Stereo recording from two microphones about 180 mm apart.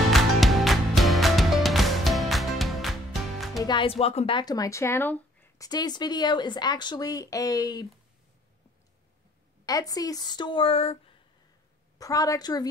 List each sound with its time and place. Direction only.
0.1 s music: centre (ahead or behind)
3.6 s speech: 30° left (ahead or behind); by 5.7 s 10° left (ahead or behind)
5.7 s speech: 20° left (ahead or behind)
9.7 s speech: 20° left (ahead or behind)
12.0 s speech: 20° left (ahead or behind)